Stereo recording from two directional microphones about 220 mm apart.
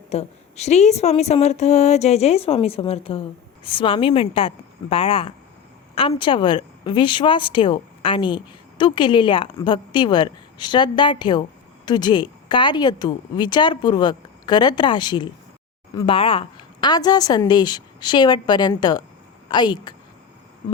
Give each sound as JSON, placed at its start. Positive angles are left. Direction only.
{"t": 0.1, "sound": "a woman's voice", "side_deg": 30}